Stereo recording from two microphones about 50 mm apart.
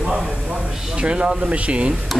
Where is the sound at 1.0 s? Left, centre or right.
Centre.